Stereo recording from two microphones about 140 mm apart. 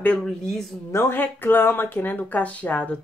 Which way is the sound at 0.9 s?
15° left (ahead or behind).